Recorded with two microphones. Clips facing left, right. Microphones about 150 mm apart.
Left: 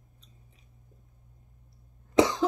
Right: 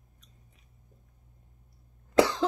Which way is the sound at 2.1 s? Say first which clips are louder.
Even; 15° left (ahead or behind).